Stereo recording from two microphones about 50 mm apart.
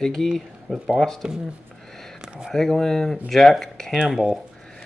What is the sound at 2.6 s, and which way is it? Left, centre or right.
Speech, centre.